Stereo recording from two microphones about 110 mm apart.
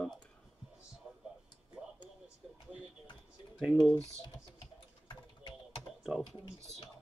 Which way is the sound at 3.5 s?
5° right (ahead or behind).